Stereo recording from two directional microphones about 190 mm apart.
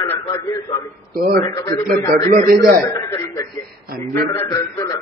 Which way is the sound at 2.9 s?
20° left (ahead or behind).